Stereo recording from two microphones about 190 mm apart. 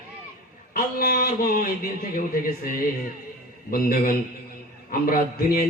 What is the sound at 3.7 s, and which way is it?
A man's voice, 50° left (ahead or behind).